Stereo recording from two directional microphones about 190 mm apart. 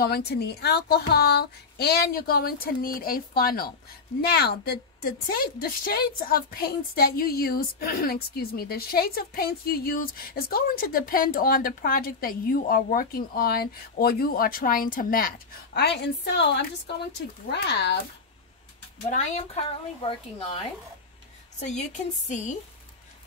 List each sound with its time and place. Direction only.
0.0 s a woman's voice: 55° left (ahead or behind)
19.0 s a woman's voice: 40° left (ahead or behind)
20.0 s a woman's voice: 25° left (ahead or behind)